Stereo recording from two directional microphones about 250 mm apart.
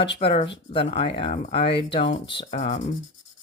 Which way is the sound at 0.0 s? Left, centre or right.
Left.